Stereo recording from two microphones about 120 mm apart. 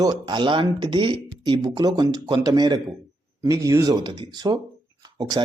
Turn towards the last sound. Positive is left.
turn(degrees=-40)  # may be behind; listen again after turning